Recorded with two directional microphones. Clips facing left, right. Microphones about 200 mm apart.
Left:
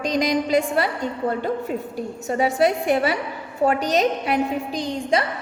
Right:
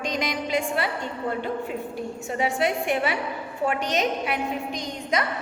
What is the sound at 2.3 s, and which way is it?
A woman's voice, 40° left (ahead or behind).